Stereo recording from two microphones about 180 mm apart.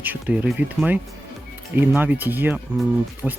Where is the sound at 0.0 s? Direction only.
10° right (ahead or behind).